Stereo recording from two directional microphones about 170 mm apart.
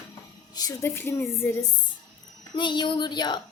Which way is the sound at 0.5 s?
20° left (ahead or behind).